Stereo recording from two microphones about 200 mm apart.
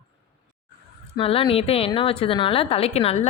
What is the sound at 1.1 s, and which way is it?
A woman's voice, 30° left (ahead or behind).